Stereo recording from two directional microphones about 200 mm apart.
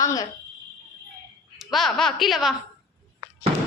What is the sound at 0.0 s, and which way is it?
Speech, 15° left (ahead or behind).